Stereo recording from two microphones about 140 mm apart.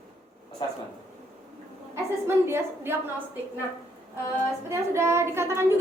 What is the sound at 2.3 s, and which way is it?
Speech, 15° right (ahead or behind).